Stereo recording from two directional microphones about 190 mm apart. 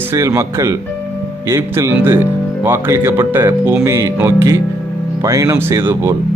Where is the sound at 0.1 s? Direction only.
15° right (ahead or behind).